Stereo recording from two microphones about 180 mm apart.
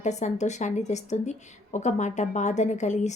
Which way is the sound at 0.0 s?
40° left (ahead or behind).